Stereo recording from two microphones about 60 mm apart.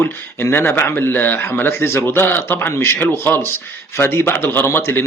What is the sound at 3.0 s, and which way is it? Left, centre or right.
A man's voice, left.